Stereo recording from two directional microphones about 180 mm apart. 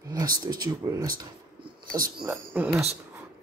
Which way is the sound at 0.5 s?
20° right (ahead or behind).